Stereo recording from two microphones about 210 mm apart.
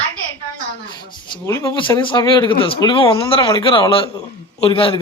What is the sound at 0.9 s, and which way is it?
A man's voice, 20° left (ahead or behind).